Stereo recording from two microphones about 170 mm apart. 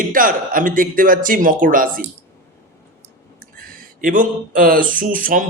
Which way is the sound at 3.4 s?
55° right (ahead or behind).